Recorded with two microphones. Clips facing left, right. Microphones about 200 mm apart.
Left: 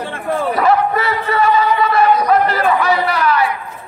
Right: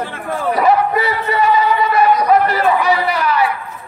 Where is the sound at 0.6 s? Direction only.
15° right (ahead or behind).